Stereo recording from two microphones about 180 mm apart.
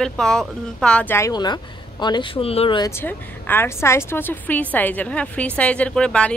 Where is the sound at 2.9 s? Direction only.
10° left (ahead or behind).